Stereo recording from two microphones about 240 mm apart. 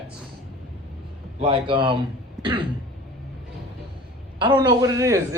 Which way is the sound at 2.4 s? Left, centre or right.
Centre.